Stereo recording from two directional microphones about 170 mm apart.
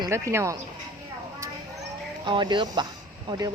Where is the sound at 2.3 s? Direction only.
25° right (ahead or behind).